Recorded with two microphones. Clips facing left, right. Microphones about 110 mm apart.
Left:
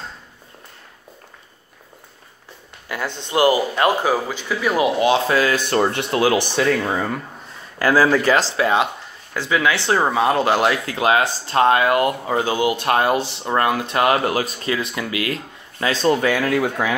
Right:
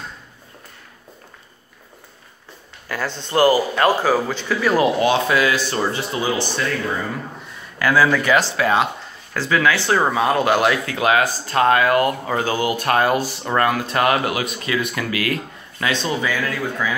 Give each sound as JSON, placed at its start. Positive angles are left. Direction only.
{"t": 2.9, "sound": "a man's voice", "side_deg": 20}
{"t": 5.4, "sound": "speech", "side_deg": 50}
{"t": 7.8, "sound": "speech", "side_deg": 35}
{"t": 15.9, "sound": "speech", "side_deg": 40}
{"t": 16.2, "sound": "speech", "side_deg": 60}